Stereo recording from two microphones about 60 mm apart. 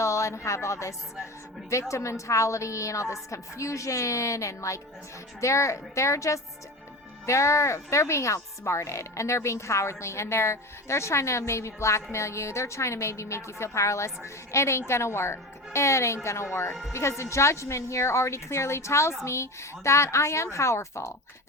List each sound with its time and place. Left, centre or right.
0.0 s a woman's voice: left